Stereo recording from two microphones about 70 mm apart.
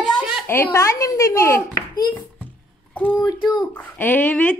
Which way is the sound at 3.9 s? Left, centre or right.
Left.